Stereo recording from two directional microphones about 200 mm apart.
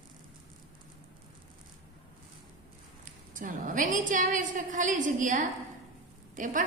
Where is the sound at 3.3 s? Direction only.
40° right (ahead or behind).